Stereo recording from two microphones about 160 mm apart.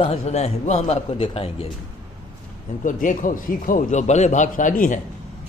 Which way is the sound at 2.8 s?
55° left (ahead or behind).